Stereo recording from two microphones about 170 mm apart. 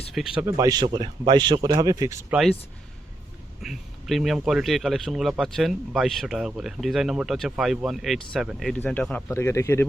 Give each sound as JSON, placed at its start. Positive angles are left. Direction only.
{"t": 0.1, "sound": "speech", "side_deg": -5}
{"t": 0.4, "sound": "speech", "side_deg": -20}
{"t": 2.3, "sound": "speech", "side_deg": 0}
{"t": 3.6, "sound": "speech", "side_deg": 0}